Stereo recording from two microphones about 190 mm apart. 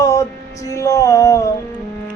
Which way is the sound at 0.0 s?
15° left (ahead or behind).